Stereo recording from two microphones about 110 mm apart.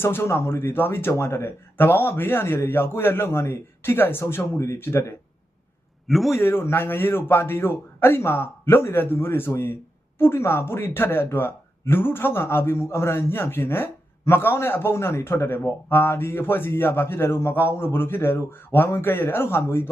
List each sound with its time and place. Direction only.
0.0 s speech: 20° left (ahead or behind)
6.1 s a man's voice: centre (ahead or behind)
6.4 s speech: 20° left (ahead or behind)